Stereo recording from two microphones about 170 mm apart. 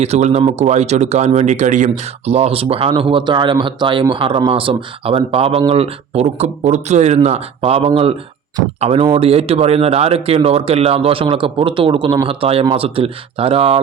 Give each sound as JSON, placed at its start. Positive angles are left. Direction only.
{"t": 0.0, "sound": "speech", "side_deg": -40}